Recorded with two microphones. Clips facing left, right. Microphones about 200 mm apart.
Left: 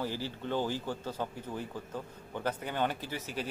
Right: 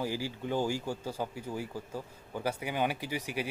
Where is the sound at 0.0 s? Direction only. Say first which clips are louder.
Right 2 dB; 10° right (ahead or behind).